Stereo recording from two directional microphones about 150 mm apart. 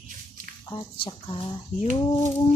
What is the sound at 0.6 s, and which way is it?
Speech, 30° left (ahead or behind).